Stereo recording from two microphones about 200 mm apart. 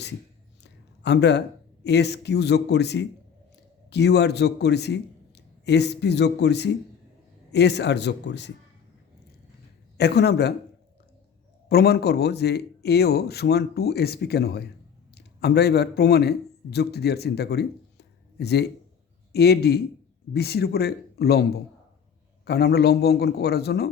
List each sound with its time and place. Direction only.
0.6 s a man's voice: 60° left (ahead or behind)
10.0 s a man's voice: 55° left (ahead or behind)
11.7 s a man's voice: 55° left (ahead or behind)
22.4 s a man's voice: 55° left (ahead or behind)